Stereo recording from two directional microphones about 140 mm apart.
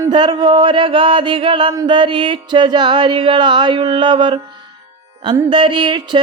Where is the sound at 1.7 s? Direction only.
25° right (ahead or behind).